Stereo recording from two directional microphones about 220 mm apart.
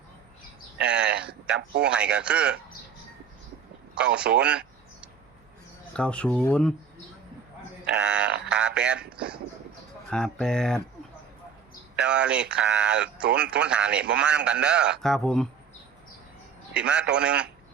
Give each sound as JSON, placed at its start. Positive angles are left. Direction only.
{"t": 1.0, "sound": "speech", "side_deg": -45}
{"t": 1.3, "sound": "speech", "side_deg": -5}
{"t": 3.9, "sound": "speech", "side_deg": -5}
{"t": 5.9, "sound": "speech", "side_deg": 5}
{"t": 7.9, "sound": "speech", "side_deg": -5}
{"t": 11.9, "sound": "speech", "side_deg": -5}
{"t": 16.7, "sound": "speech", "side_deg": -5}